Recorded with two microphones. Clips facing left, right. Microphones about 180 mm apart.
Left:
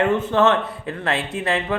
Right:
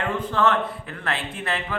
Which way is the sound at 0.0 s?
25° left (ahead or behind).